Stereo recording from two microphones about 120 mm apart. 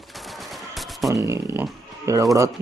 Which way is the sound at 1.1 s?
25° right (ahead or behind).